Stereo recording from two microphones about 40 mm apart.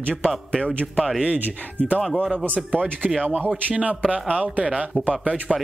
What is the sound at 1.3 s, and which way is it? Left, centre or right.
Speech, right.